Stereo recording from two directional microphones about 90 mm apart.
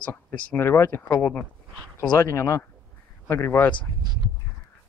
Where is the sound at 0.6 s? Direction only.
25° left (ahead or behind).